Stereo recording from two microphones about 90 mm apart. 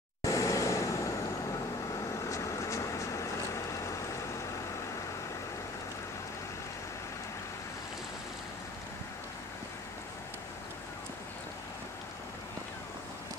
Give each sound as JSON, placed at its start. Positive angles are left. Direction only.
{"t": 0.2, "sound": "vehicle", "side_deg": 35}
{"t": 2.2, "sound": "vehicle", "side_deg": 35}